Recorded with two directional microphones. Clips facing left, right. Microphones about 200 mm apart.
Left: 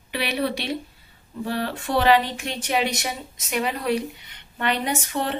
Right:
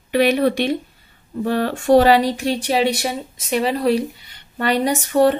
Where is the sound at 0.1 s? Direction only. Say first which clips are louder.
Right 10 dB; 45° right (ahead or behind).